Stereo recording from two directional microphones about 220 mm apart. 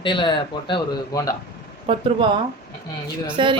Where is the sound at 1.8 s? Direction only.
25° right (ahead or behind).